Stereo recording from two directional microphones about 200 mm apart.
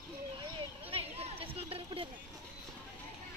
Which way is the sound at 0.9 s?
30° right (ahead or behind).